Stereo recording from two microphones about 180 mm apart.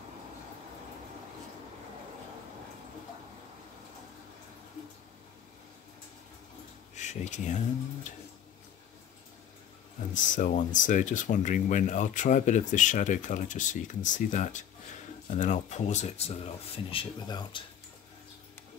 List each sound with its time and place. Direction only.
7.0 s speech: 40° left (ahead or behind)
10.1 s speech: 45° left (ahead or behind); by 17.6 s 25° left (ahead or behind)